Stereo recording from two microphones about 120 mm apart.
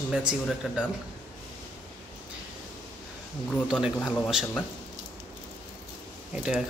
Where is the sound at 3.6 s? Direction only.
5° right (ahead or behind).